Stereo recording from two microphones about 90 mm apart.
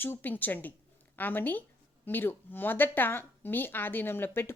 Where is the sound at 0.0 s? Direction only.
20° left (ahead or behind).